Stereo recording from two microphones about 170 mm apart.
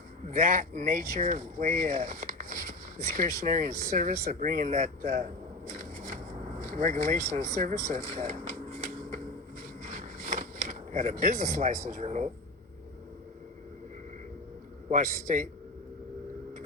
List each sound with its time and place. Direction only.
0.3 s speech: 50° right (ahead or behind)
6.6 s speech: 50° right (ahead or behind)
9.8 s a sound: 45° right (ahead or behind)
11.2 s speech: 45° right (ahead or behind)
14.8 s speech: 50° right (ahead or behind)